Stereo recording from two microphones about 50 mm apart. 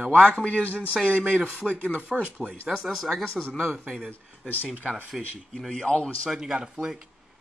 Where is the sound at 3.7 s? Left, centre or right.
Centre.